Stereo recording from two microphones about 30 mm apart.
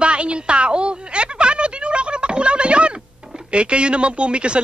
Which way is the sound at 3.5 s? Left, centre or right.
Right.